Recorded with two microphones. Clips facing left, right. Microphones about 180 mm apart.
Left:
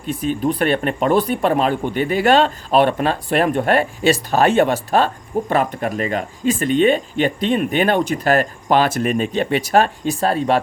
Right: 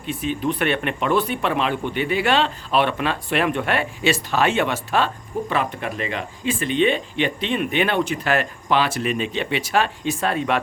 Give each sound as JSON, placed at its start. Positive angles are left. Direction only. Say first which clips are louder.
{"t": 0.0, "sound": "speech", "louder": "left 4 dB", "side_deg": 40}